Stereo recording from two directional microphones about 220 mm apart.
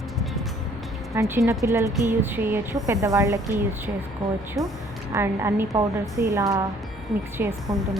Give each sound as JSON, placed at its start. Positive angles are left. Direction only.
{"t": 1.1, "sound": "speech", "side_deg": -15}
{"t": 4.6, "sound": "speech", "side_deg": 0}
{"t": 5.1, "sound": "speech", "side_deg": -15}